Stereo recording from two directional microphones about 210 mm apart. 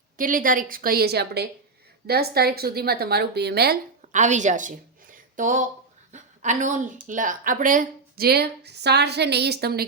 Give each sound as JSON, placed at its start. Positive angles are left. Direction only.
{"t": 0.2, "sound": "a woman's voice", "side_deg": -40}
{"t": 4.0, "sound": "a woman's voice", "side_deg": -35}